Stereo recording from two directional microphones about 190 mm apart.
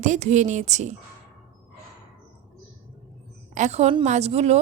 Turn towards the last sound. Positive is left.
turn(degrees=-35)  # may be behind; listen again after turning